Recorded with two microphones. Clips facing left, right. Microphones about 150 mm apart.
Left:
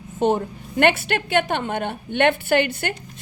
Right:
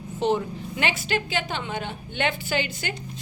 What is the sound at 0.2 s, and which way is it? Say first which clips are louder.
A woman's voice: left 4 dB; 50° left (ahead or behind).